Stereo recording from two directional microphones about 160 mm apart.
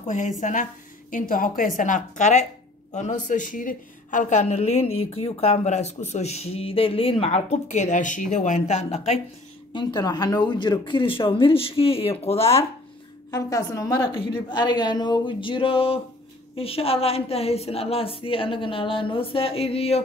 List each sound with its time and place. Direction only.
0.0 s a woman's voice: 50° left (ahead or behind)
9.7 s a woman's voice: 30° left (ahead or behind)
13.3 s a woman's voice: 20° left (ahead or behind); by 20.0 s 40° left (ahead or behind)